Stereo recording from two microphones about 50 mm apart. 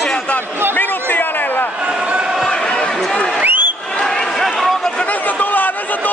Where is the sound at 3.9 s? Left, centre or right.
Centre.